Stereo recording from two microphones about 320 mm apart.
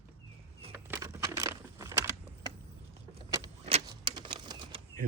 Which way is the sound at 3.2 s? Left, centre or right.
Centre.